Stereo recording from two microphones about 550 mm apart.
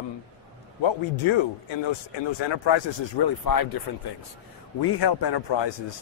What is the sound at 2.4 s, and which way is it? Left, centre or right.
Speech, left.